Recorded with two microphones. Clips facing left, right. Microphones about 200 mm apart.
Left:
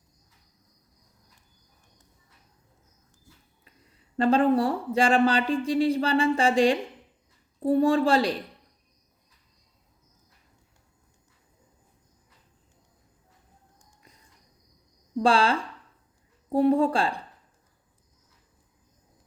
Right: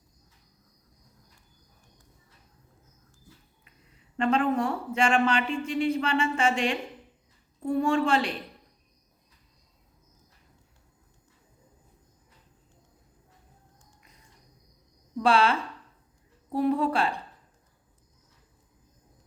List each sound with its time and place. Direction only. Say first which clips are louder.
4.2 s speech: left 4 dB; 35° left (ahead or behind)
15.2 s speech: left 1 dB; 30° left (ahead or behind)